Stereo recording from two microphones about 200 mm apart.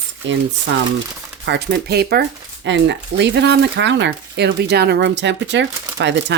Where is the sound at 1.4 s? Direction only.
55° right (ahead or behind).